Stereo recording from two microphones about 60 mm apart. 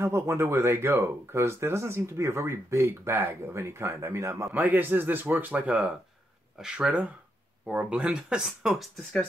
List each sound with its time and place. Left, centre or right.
0.0 s speech: right
4.6 s speech: right
6.6 s speech: centre
8.5 s speech: centre